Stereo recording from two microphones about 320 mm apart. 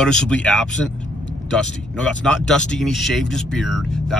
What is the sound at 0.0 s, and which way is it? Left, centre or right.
Speech, centre.